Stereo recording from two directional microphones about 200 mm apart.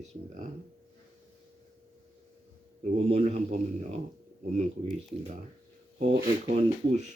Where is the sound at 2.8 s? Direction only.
35° right (ahead or behind).